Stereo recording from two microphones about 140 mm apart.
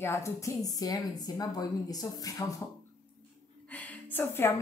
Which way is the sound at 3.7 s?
10° left (ahead or behind).